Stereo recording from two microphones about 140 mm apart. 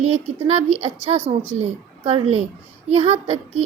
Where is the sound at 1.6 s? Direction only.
45° right (ahead or behind).